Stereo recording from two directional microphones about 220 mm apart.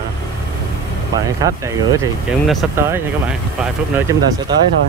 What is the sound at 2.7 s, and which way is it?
Speech, 10° right (ahead or behind).